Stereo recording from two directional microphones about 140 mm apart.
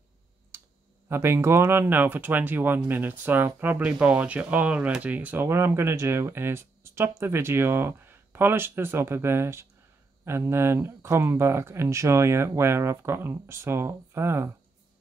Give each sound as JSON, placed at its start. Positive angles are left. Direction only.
{"t": 0.5, "sound": "clicking", "side_deg": -20}
{"t": 1.0, "sound": "speech", "side_deg": -20}